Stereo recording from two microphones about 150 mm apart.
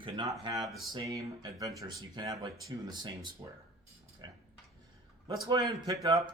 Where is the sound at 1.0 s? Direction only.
20° right (ahead or behind).